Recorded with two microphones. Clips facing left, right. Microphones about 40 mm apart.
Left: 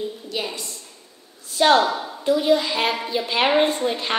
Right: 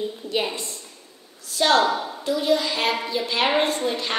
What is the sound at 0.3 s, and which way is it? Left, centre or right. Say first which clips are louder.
Speech: right 5 dB; right.